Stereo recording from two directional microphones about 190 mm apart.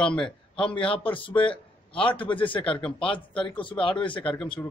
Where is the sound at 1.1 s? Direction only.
25° left (ahead or behind).